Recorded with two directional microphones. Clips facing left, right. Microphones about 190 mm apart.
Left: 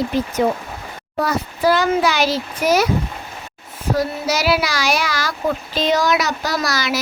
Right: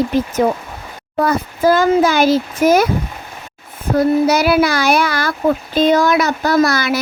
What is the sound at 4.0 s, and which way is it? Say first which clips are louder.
A child's voice: right 9 dB; 55° right (ahead or behind).